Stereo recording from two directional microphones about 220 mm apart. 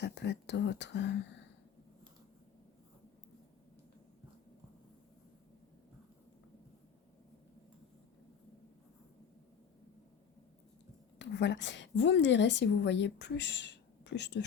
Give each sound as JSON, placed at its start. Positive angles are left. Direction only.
{"t": 0.0, "sound": "speech", "side_deg": 50}
{"t": 11.2, "sound": "a woman's voice", "side_deg": 50}